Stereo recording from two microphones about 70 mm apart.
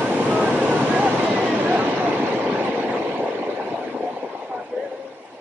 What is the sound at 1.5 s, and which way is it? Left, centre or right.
Vehicle, right.